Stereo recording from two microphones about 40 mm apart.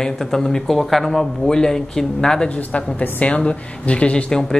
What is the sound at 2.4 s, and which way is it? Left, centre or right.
A woman's voice, left.